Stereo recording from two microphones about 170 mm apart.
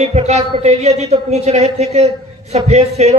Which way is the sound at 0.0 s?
40° right (ahead or behind).